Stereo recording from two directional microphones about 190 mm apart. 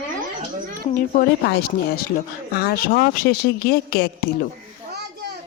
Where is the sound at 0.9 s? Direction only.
45° left (ahead or behind).